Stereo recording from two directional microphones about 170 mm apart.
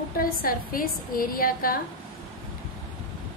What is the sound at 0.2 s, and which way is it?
A woman's voice, 60° left (ahead or behind).